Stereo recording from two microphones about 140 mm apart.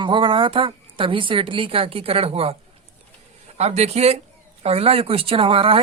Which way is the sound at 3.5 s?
50° right (ahead or behind).